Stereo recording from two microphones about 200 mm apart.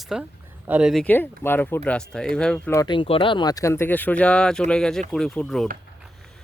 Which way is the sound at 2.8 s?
25° left (ahead or behind).